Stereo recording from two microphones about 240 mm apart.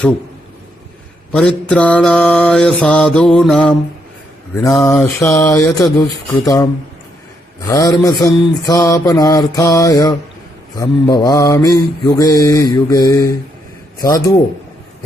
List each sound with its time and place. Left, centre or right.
1.3 s mantra: centre
7.7 s mantra: centre